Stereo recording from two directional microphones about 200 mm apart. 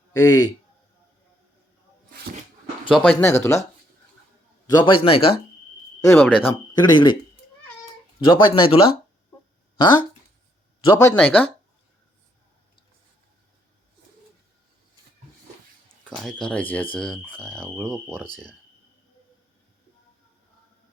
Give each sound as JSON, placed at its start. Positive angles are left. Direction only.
{"t": 0.1, "sound": "a man's voice", "side_deg": 20}
{"t": 2.9, "sound": "speech", "side_deg": 5}
{"t": 4.6, "sound": "speech", "side_deg": 20}
{"t": 6.1, "sound": "speech", "side_deg": 10}
{"t": 6.7, "sound": "speech", "side_deg": 20}
{"t": 8.3, "sound": "speech", "side_deg": 25}
{"t": 10.8, "sound": "speech", "side_deg": 15}
{"t": 16.0, "sound": "speech", "side_deg": 5}